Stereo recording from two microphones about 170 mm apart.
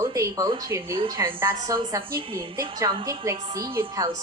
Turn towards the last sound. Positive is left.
turn(degrees=-15)  # may be behind; listen again after turning